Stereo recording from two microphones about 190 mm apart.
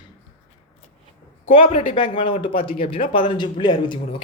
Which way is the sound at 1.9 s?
25° left (ahead or behind).